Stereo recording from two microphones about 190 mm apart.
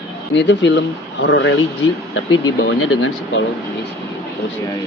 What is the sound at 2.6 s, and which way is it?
Speech, 90° left.